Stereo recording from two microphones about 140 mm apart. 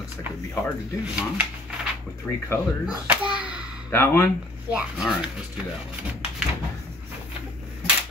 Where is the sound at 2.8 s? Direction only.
10° right (ahead or behind).